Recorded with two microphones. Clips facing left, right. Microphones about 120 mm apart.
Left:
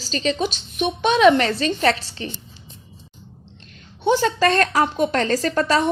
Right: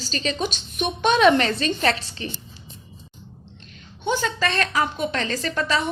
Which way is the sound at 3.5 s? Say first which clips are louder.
Even; 35° left (ahead or behind).